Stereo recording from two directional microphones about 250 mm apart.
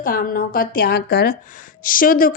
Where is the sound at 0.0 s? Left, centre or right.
Left.